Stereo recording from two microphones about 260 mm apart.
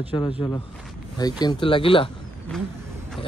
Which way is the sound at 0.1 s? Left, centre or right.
Centre.